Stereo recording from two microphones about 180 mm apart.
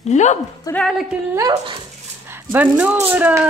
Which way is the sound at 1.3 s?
20° right (ahead or behind).